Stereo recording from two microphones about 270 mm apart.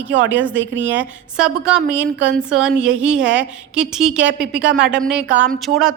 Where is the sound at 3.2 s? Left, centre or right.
Right.